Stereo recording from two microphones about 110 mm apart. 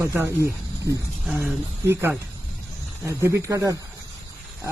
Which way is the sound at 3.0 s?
25° right (ahead or behind).